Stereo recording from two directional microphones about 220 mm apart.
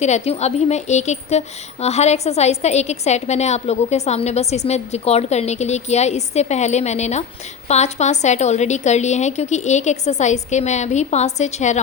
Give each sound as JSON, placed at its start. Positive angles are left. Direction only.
{"t": 0.0, "sound": "speech", "side_deg": 30}